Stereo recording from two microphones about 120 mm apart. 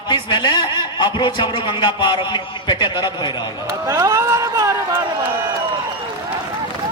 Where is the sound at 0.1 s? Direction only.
40° left (ahead or behind).